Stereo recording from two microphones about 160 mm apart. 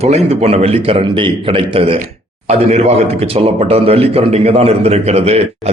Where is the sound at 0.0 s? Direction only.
40° right (ahead or behind).